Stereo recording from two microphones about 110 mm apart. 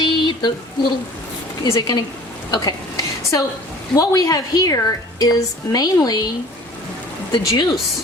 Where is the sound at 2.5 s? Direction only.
35° left (ahead or behind).